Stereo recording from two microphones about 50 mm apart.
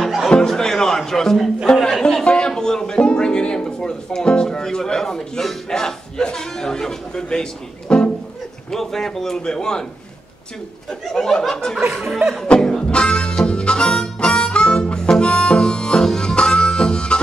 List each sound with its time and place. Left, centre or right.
0.0 s music: centre
0.3 s music: centre
1.7 s a sound: centre
2.2 s music: centre
7.9 s speech: centre
11.6 s speech: centre
12.4 s music: centre
13.5 s harmonica: centre